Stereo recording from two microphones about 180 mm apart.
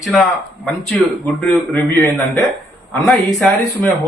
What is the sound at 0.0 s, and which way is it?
A man's voice, centre (ahead or behind).